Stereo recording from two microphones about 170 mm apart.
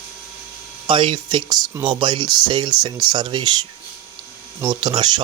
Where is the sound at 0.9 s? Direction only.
30° right (ahead or behind).